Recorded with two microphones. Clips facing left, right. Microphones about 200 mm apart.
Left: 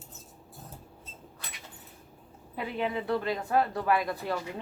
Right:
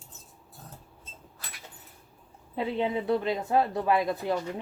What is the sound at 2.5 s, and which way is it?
Speech, 25° right (ahead or behind).